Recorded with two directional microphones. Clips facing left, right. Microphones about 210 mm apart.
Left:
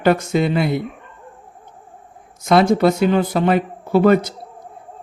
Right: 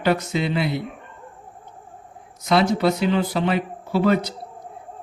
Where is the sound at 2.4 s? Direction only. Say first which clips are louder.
Left 5 dB; 50° left (ahead or behind).